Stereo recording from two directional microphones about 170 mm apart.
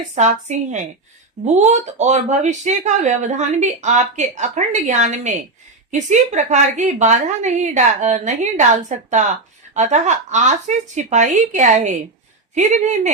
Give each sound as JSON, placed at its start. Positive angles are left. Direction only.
{"t": 0.1, "sound": "speech", "side_deg": -45}